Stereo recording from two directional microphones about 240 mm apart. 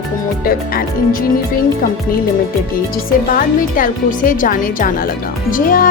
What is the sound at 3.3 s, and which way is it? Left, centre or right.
Music, left.